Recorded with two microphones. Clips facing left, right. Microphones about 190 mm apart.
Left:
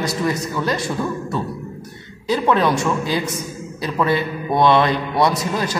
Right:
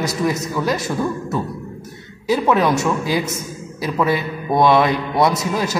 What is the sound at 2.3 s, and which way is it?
A man's voice, 10° right (ahead or behind).